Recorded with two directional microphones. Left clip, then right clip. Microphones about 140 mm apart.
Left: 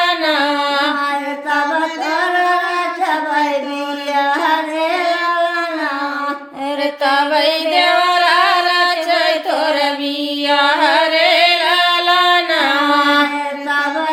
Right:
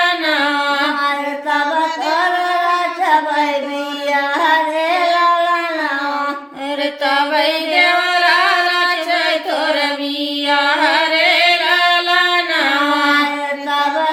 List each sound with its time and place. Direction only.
0.3 s music: 40° left (ahead or behind)
7.0 s singing: 40° left (ahead or behind)
10.5 s music: 40° left (ahead or behind)